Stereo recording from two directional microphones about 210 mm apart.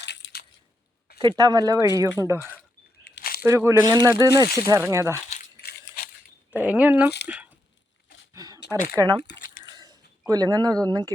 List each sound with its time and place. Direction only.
0.0 s crushing: 55° left (ahead or behind)
1.4 s speech: 20° right (ahead or behind)
3.0 s a sound: 50° left (ahead or behind)
3.4 s speech: 10° right (ahead or behind)
5.3 s coin: 45° left (ahead or behind)
6.5 s speech: 5° right (ahead or behind)
8.3 s a sound: 15° right (ahead or behind)
8.9 s speech: 15° right (ahead or behind)
9.6 s a sound: 20° right (ahead or behind)